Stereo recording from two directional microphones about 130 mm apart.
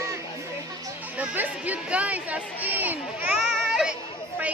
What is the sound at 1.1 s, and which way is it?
Speech, 10° right (ahead or behind).